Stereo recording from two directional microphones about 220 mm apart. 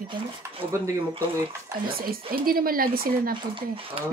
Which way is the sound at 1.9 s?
40° right (ahead or behind).